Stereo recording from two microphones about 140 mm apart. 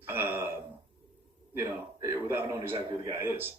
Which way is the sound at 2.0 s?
15° right (ahead or behind).